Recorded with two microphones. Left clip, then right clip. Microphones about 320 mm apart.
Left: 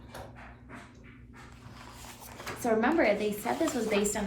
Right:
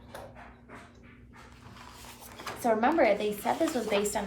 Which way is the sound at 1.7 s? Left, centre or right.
Centre.